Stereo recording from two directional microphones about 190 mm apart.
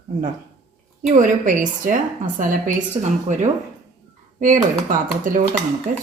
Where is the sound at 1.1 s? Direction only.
40° right (ahead or behind).